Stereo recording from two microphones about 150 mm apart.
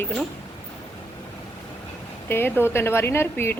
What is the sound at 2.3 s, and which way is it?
Speech, 15° left (ahead or behind).